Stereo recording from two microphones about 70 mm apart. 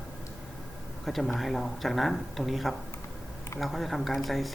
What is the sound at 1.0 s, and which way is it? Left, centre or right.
Speech, centre.